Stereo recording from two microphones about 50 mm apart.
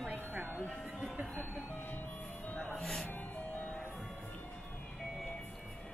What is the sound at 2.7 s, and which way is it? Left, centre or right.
Speech, centre.